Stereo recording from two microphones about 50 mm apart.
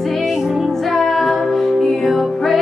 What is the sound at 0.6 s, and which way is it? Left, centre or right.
Music, centre.